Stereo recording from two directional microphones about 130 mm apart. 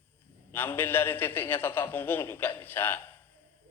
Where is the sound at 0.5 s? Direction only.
15° left (ahead or behind).